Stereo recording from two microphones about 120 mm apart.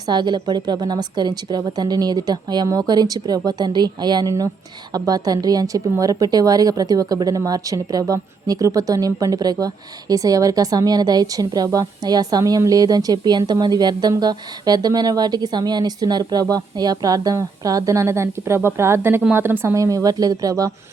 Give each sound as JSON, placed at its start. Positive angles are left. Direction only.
{"t": 0.1, "sound": "a woman's voice", "side_deg": -40}